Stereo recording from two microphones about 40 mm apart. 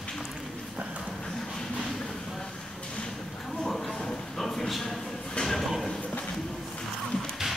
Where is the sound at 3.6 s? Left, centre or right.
Centre.